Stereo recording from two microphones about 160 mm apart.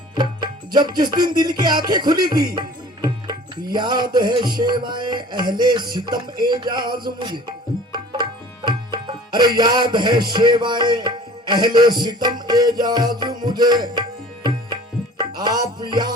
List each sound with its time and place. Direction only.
0.2 s music: 25° right (ahead or behind)
7.9 s tabla: 30° right (ahead or behind)
9.6 s music: 25° right (ahead or behind)
15.2 s music: 25° right (ahead or behind)